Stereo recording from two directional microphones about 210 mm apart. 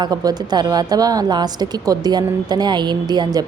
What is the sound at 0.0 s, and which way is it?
A woman's voice, 20° right (ahead or behind).